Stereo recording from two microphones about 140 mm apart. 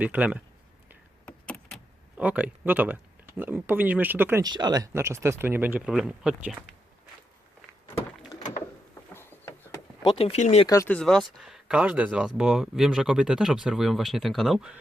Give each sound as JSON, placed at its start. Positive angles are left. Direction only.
{"t": 0.0, "sound": "speech", "side_deg": -10}
{"t": 1.2, "sound": "vehicle", "side_deg": 5}
{"t": 2.1, "sound": "speech", "side_deg": -10}
{"t": 4.4, "sound": "speech", "side_deg": -30}
{"t": 9.1, "sound": "a sound", "side_deg": 15}
{"t": 10.0, "sound": "speech", "side_deg": 35}
{"t": 10.8, "sound": "speech", "side_deg": 5}